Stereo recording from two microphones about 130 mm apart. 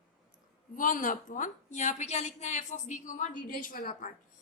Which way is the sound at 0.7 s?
90° left.